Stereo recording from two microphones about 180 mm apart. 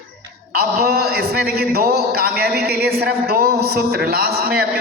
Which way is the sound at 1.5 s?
60° right (ahead or behind).